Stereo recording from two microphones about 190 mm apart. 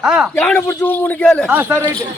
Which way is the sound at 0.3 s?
10° left (ahead or behind).